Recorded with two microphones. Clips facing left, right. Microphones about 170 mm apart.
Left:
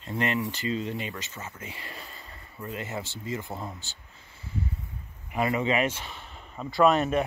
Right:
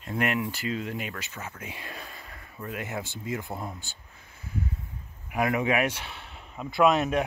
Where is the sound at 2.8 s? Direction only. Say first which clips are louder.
Right 1 dB; 15° right (ahead or behind).